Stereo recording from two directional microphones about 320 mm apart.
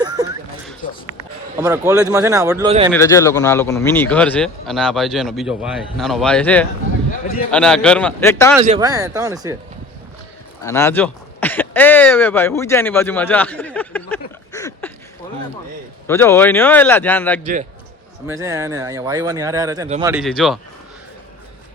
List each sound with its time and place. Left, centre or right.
1.5 s speech: centre
2.9 s speech: centre
8.6 s speech: centre
10.6 s speech: centre
16.0 s speech: centre
17.4 s a man's voice: right
18.3 s speech: centre